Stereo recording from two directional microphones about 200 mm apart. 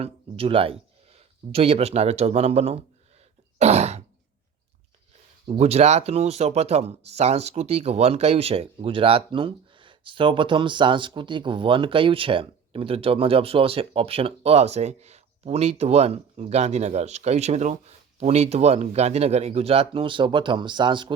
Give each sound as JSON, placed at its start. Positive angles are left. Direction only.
{"t": 0.0, "sound": "speech", "side_deg": -25}
{"t": 3.6, "sound": "throat clearing", "side_deg": -30}
{"t": 5.5, "sound": "speech", "side_deg": -30}